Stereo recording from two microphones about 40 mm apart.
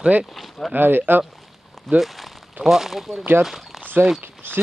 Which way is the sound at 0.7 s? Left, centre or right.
Right.